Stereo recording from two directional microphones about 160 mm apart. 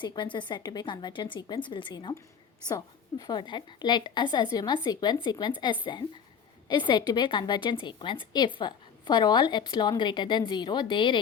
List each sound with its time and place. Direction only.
0.0 s a woman's voice: 30° left (ahead or behind)